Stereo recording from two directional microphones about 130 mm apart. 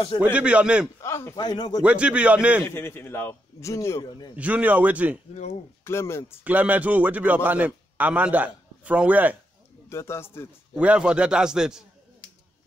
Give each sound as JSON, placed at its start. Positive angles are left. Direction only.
{"t": 0.2, "sound": "a man's voice", "side_deg": -10}
{"t": 1.0, "sound": "speech", "side_deg": 20}
{"t": 1.4, "sound": "speech", "side_deg": 30}
{"t": 1.8, "sound": "a man's voice", "side_deg": -10}
{"t": 2.6, "sound": "a man's voice", "side_deg": 15}
{"t": 4.4, "sound": "a man's voice", "side_deg": -10}
{"t": 5.9, "sound": "a man's voice", "side_deg": 20}
{"t": 6.4, "sound": "a man's voice", "side_deg": -10}
{"t": 9.8, "sound": "a man's voice", "side_deg": 20}
{"t": 10.8, "sound": "a man's voice", "side_deg": -10}